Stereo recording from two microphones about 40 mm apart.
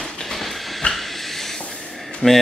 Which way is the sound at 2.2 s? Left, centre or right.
Centre.